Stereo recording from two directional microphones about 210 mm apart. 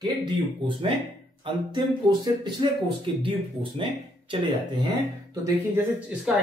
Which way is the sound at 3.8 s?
25° right (ahead or behind).